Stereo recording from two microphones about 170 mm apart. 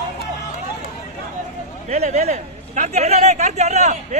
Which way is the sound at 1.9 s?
40° right (ahead or behind).